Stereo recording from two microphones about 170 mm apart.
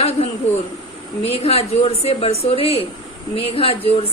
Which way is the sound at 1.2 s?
35° left (ahead or behind).